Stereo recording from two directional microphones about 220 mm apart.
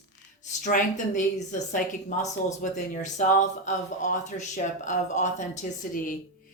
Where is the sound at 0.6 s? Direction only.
35° left (ahead or behind).